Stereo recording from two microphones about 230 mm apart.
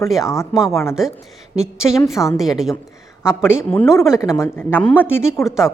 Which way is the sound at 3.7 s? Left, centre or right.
Centre.